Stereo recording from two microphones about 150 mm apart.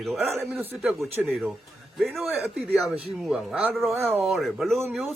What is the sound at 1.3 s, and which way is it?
A man's voice, centre (ahead or behind).